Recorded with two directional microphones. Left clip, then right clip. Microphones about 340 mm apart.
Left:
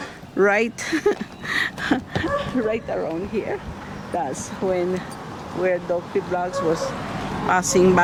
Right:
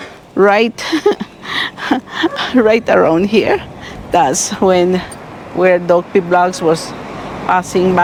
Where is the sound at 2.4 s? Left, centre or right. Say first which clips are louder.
Right 12 dB; right.